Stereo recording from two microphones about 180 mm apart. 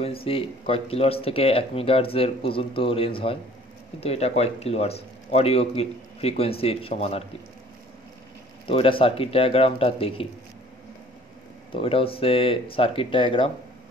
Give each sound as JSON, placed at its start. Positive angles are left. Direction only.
{"t": 0.0, "sound": "speech", "side_deg": 30}
{"t": 8.6, "sound": "speech", "side_deg": 30}
{"t": 11.7, "sound": "speech", "side_deg": 30}